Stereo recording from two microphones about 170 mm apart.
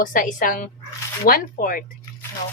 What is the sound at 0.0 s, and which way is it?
A woman's voice, 55° left (ahead or behind).